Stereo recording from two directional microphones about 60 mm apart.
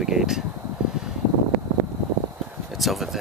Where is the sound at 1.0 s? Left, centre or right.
Centre.